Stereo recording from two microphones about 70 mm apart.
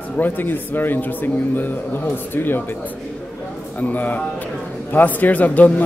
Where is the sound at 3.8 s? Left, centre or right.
Left.